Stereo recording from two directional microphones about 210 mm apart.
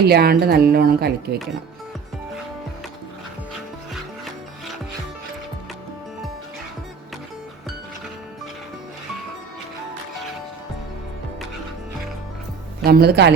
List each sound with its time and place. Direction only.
0.1 s speech: 45° right (ahead or behind)
12.8 s speech: 50° right (ahead or behind)